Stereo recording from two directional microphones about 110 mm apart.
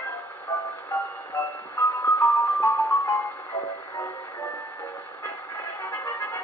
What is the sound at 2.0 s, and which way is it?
Music, 25° left (ahead or behind).